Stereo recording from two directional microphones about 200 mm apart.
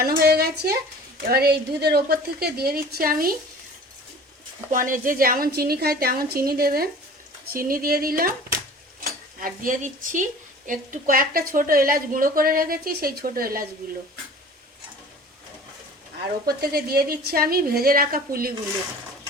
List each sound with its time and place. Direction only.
0.0 s a woman's voice: 50° right (ahead or behind)
4.7 s a woman's voice: 40° right (ahead or behind)
9.0 s cutlery: 45° right (ahead or behind)
10.7 s a woman's voice: 40° right (ahead or behind)
16.5 s a woman's voice: 50° right (ahead or behind)